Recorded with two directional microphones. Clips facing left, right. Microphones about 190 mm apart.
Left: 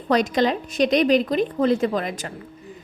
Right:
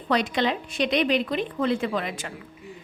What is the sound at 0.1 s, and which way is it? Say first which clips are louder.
A woman's voice: left 4 dB; 40° left (ahead or behind).